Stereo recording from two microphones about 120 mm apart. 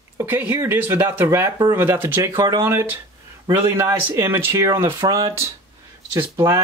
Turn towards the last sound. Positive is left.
turn(degrees=-25)  # may be behind; listen again after turning